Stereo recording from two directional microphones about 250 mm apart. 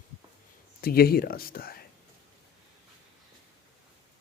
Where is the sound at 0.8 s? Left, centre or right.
Left.